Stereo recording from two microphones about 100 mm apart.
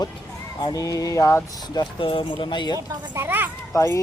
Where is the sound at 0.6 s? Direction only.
40° left (ahead or behind).